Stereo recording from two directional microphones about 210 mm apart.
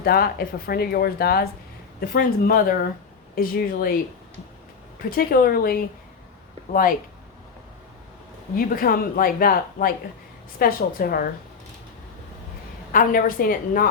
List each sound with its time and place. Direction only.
0.0 s speech: 45° left (ahead or behind)
5.1 s speech: 45° left (ahead or behind)
8.5 s speech: 45° left (ahead or behind)
12.9 s a woman's voice: 40° left (ahead or behind)